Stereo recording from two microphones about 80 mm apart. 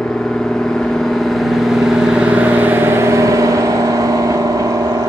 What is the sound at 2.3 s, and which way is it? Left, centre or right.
Vehicle, centre.